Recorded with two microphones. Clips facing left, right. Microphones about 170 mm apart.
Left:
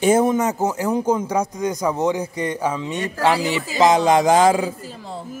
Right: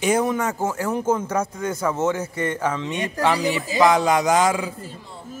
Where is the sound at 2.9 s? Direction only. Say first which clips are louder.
Left 1 dB; 15° right (ahead or behind).